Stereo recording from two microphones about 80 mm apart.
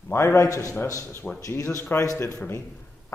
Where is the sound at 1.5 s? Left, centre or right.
Left.